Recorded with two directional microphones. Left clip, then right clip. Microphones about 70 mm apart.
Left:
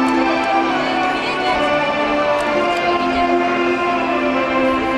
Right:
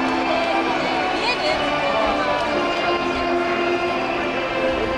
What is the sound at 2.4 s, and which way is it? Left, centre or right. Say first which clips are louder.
Vehicle: left 4 dB; left.